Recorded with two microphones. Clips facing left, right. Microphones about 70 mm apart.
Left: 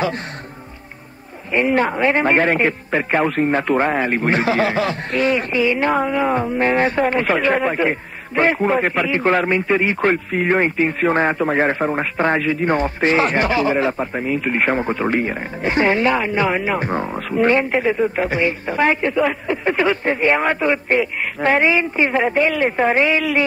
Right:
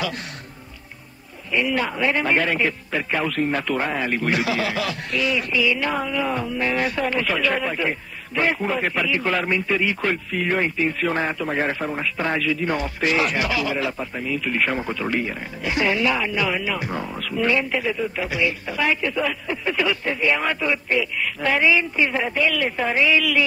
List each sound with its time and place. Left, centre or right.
1.5 s a man's voice: left